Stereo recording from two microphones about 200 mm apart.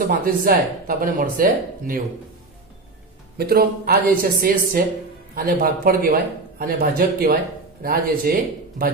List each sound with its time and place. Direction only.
0.0 s a man's voice: 45° right (ahead or behind)
3.3 s a man's voice: 50° right (ahead or behind)